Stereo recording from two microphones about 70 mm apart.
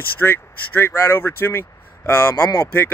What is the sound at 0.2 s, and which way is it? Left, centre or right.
Speech, left.